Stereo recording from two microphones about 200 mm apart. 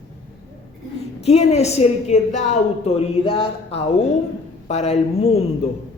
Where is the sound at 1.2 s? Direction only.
30° left (ahead or behind).